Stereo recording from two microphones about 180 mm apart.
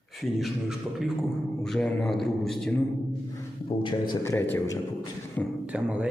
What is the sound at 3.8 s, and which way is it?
Speech, 25° left (ahead or behind).